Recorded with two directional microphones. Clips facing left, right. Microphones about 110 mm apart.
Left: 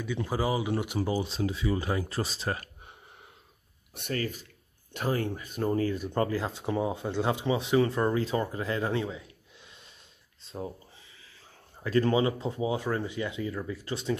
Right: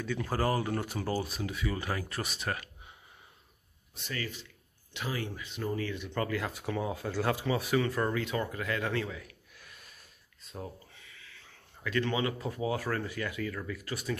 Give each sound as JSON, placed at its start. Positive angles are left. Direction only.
{"t": 0.3, "sound": "speech", "side_deg": 10}
{"t": 4.1, "sound": "speech", "side_deg": 45}